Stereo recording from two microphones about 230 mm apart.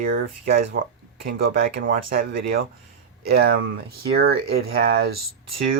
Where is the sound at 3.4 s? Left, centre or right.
Right.